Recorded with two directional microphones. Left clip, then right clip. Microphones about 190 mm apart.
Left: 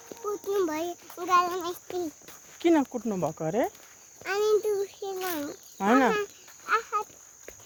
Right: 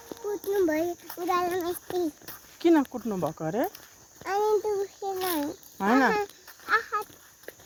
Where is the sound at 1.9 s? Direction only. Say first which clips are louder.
Right 4 dB; 30° right (ahead or behind).